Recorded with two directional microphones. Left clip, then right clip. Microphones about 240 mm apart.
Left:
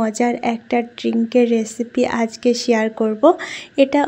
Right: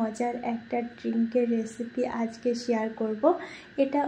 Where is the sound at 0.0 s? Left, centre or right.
Left.